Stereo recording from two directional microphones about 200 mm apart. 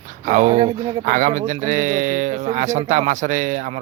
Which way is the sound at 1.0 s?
40° right (ahead or behind).